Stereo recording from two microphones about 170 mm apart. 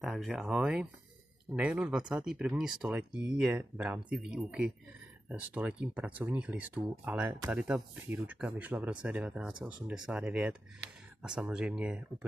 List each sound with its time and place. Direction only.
0.0 s speech: centre (ahead or behind)